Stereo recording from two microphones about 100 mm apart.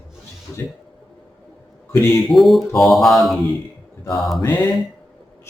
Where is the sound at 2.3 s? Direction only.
Centre (ahead or behind).